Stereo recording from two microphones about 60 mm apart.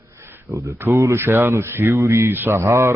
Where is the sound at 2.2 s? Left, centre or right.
Right.